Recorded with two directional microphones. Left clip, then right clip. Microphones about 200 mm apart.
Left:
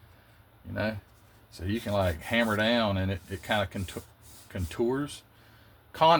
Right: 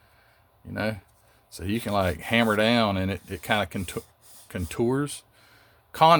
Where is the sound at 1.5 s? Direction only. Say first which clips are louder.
Right 3 dB; 60° right (ahead or behind).